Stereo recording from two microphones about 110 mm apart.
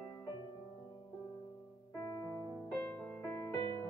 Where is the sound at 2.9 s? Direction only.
15° left (ahead or behind).